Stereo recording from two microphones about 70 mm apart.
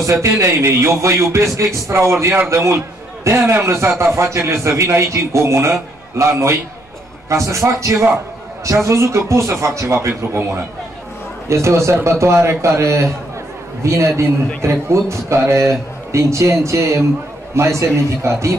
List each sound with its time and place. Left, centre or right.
0.0 s a man's voice: right